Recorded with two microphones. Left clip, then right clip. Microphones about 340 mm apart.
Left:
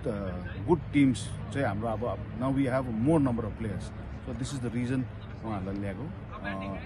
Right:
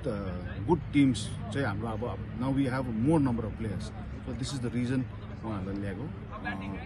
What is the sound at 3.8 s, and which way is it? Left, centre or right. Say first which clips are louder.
Speech: right 1 dB; centre.